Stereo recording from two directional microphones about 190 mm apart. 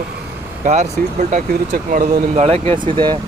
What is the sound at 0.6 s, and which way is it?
Speech, 35° right (ahead or behind).